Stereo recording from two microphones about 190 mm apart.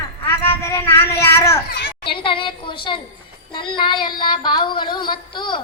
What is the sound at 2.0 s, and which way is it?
A woman's voice, 25° left (ahead or behind).